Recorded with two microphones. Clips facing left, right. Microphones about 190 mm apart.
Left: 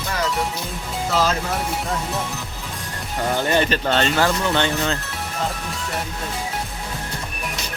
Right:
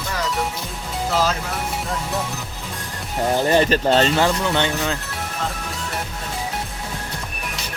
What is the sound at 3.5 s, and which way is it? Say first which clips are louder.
Speech: right 4 dB; 30° right (ahead or behind).